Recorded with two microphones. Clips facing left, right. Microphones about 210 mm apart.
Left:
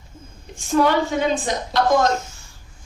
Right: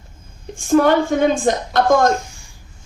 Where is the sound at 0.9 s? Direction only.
50° right (ahead or behind).